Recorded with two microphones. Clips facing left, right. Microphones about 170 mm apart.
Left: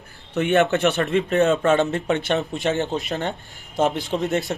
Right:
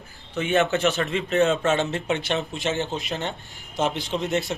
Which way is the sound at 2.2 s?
55° left (ahead or behind).